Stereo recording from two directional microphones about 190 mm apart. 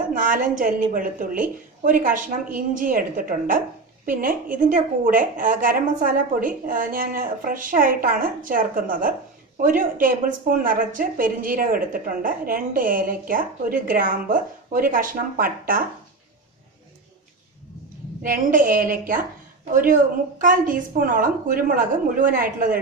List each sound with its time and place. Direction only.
0.2 s a woman's voice: 45° right (ahead or behind)
18.2 s a woman's voice: 45° right (ahead or behind)